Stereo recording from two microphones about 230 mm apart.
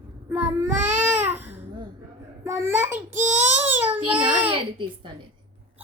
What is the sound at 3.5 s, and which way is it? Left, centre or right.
Baby cry, centre.